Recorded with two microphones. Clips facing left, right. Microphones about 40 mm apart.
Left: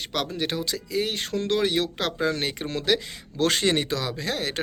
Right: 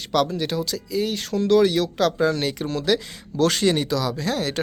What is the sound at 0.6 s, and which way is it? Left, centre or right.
Speech, left.